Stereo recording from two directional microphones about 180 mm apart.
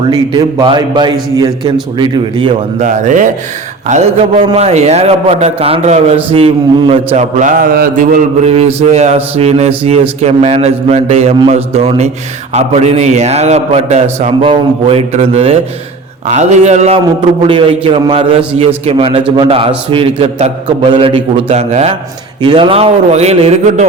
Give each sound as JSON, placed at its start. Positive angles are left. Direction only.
{"t": 0.0, "sound": "a man's voice", "side_deg": -25}
{"t": 2.8, "sound": "speech", "side_deg": -40}
{"t": 3.8, "sound": "mantra", "side_deg": -40}
{"t": 17.4, "sound": "a man's voice", "side_deg": -30}
{"t": 18.9, "sound": "mantra", "side_deg": -30}